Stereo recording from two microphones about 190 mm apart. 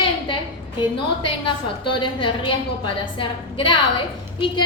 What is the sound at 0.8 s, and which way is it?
A woman's voice, 25° left (ahead or behind).